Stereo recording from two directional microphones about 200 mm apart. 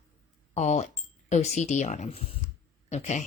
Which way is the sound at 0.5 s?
35° left (ahead or behind).